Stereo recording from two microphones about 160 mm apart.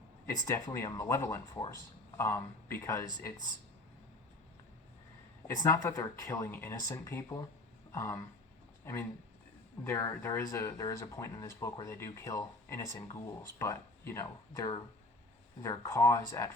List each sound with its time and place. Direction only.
0.4 s speech: 15° left (ahead or behind)
5.5 s speech: 20° left (ahead or behind)